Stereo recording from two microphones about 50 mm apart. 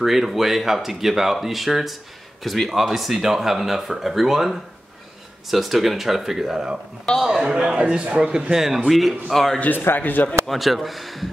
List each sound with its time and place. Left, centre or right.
0.0 s a man's voice: centre
9.6 s speech: left
10.4 s speech: centre